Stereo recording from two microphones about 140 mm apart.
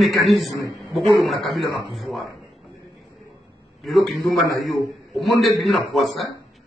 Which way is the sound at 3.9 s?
Centre (ahead or behind).